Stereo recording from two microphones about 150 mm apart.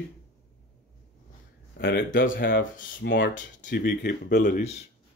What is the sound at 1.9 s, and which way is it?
Speech, 80° left.